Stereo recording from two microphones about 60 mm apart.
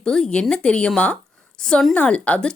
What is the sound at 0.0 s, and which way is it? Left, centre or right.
Speech, centre.